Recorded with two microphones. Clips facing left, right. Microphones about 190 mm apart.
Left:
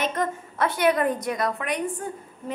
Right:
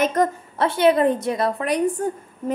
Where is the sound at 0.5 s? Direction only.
25° right (ahead or behind).